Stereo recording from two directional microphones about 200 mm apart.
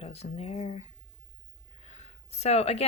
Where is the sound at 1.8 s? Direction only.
35° left (ahead or behind).